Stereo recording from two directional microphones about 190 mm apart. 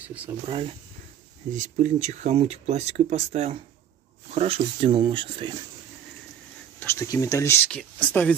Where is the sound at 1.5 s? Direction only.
40° right (ahead or behind).